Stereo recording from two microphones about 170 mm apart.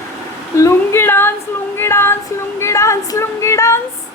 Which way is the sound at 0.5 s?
15° left (ahead or behind).